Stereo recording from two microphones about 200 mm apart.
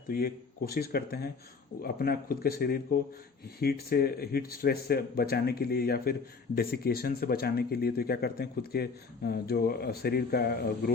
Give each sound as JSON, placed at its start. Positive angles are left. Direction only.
{"t": 0.1, "sound": "speech", "side_deg": 50}